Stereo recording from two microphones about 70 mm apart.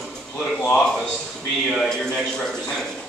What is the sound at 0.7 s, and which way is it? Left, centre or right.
A man's voice, centre.